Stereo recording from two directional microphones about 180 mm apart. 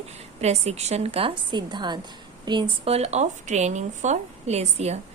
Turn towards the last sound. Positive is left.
turn(degrees=-35)  # may be behind; listen again after turning